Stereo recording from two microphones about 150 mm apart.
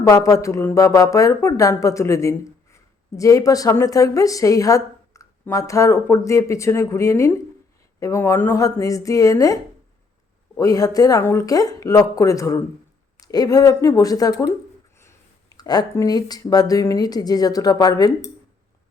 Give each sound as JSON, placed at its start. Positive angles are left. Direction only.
{"t": 0.0, "sound": "speech", "side_deg": 20}
{"t": 10.6, "sound": "speech", "side_deg": 25}